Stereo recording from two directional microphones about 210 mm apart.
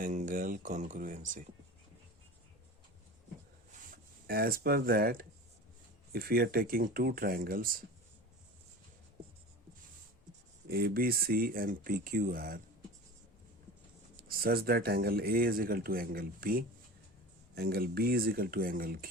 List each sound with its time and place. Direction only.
0.0 s speech: 35° right (ahead or behind)
3.7 s a sound: 45° right (ahead or behind)
6.1 s speech: 45° right (ahead or behind)
10.7 s speech: 45° right (ahead or behind)
14.2 s speech: 45° right (ahead or behind)